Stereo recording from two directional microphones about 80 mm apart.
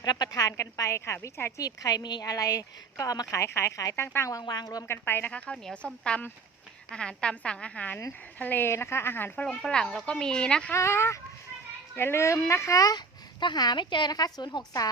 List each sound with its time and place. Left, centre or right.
0.0 s a woman's voice: left
1.6 s a woman's voice: left
3.3 s speech: left
4.0 s speech: left
4.3 s a woman's voice: left
4.9 s speech: left
5.3 s speech: centre
9.6 s speech: centre
10.8 s a woman's voice: left
13.4 s a woman's voice: left